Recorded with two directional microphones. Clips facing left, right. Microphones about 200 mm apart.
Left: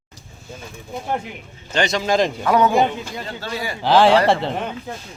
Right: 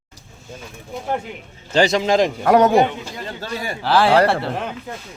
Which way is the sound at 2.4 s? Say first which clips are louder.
Right 5 dB; 45° right (ahead or behind).